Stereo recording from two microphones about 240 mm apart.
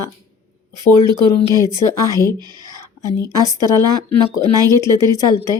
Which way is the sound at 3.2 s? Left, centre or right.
Centre.